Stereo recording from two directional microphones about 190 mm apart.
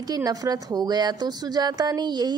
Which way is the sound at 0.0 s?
20° right (ahead or behind).